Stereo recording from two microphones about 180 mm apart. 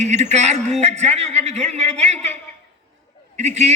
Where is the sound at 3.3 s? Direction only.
40° right (ahead or behind).